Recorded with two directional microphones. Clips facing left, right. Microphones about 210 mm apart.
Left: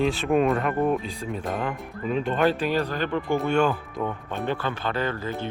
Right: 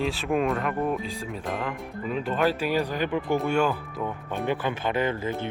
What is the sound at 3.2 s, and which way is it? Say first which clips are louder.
Speech: left 2 dB; centre (ahead or behind).